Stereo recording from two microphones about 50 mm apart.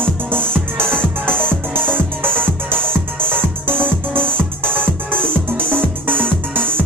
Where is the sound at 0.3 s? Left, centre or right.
Right.